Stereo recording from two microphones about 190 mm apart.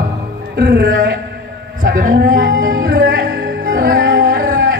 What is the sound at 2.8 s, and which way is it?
Music, 55° right (ahead or behind).